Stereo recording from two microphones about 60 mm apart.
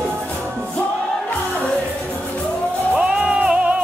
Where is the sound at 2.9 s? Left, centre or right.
Centre.